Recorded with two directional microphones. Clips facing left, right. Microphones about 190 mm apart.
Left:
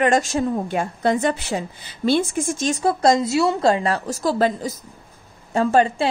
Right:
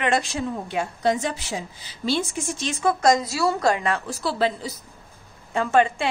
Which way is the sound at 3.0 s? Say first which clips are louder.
Left 4 dB; 30° left (ahead or behind).